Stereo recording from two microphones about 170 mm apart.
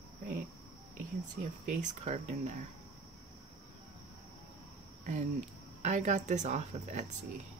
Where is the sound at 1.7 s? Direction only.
45° right (ahead or behind).